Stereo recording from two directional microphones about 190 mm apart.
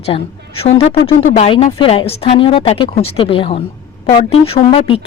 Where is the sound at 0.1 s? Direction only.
30° left (ahead or behind).